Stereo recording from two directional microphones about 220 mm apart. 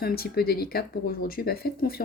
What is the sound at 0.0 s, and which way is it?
Speech, 45° left (ahead or behind).